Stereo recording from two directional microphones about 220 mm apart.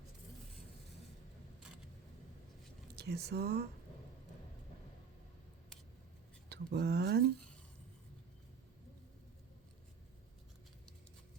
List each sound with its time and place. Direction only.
2.9 s speech: 50° right (ahead or behind)
6.5 s speech: 50° right (ahead or behind)